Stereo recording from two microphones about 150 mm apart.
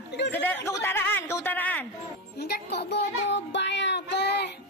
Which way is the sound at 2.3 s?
90° left.